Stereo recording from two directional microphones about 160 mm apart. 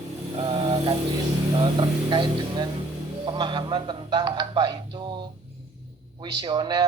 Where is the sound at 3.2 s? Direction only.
30° right (ahead or behind).